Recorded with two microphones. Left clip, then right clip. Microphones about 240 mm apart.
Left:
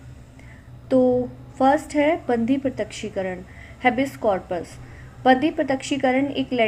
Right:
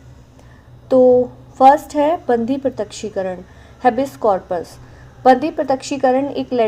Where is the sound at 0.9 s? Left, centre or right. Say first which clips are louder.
Right 7 dB; centre.